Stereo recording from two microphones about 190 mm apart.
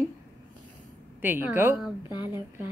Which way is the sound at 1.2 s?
10° right (ahead or behind).